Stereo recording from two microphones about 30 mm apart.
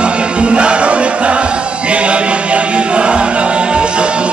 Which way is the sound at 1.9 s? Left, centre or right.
Right.